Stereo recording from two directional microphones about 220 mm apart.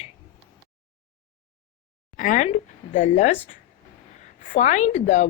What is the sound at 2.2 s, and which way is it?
Speech, 35° left (ahead or behind).